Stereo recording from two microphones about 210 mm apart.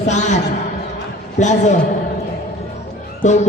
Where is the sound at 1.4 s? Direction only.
35° left (ahead or behind).